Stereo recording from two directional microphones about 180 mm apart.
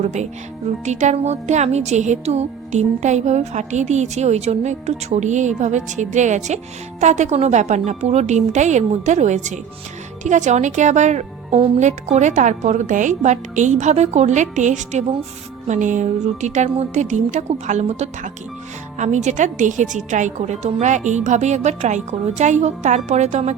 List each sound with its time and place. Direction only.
0.0 s speech: 40° right (ahead or behind)